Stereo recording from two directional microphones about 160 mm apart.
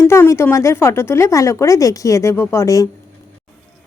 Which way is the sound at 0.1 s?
15° left (ahead or behind).